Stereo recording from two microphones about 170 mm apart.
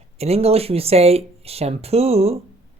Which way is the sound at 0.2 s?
35° right (ahead or behind).